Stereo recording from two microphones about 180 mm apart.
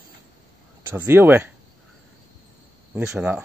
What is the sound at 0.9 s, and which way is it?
Speech, 10° right (ahead or behind).